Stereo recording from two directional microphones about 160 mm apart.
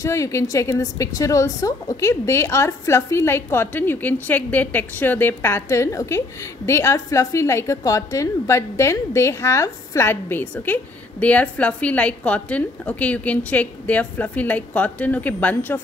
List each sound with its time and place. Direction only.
0.0 s a woman's voice: 20° left (ahead or behind)